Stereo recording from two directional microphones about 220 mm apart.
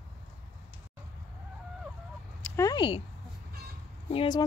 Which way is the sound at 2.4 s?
15° left (ahead or behind).